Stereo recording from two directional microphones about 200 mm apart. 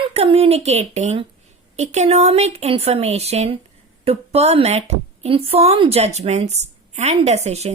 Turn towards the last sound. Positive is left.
turn(degrees=-35)  # may be behind; listen again after turning